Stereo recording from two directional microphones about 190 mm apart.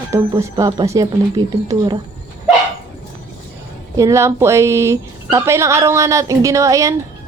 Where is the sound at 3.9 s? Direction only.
15° right (ahead or behind).